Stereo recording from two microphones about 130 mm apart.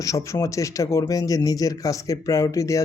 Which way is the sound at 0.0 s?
25° left (ahead or behind).